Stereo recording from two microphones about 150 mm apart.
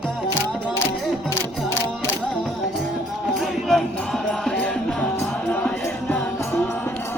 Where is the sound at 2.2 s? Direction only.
5° left (ahead or behind).